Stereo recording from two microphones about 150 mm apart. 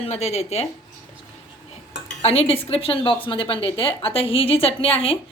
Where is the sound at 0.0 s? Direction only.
45° left (ahead or behind).